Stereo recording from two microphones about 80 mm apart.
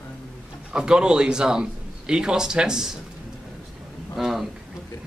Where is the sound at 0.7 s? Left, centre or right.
Centre.